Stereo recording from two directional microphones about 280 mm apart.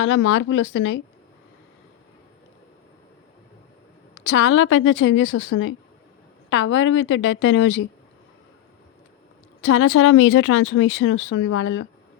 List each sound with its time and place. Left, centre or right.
0.0 s speech: left
4.2 s speech: left
9.6 s speech: left